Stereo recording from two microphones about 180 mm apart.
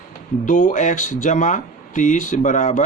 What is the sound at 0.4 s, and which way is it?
Speech, 45° left (ahead or behind).